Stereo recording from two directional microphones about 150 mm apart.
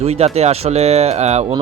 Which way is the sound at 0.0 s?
45° right (ahead or behind).